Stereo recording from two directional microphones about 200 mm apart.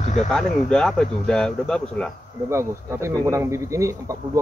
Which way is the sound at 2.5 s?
15° right (ahead or behind).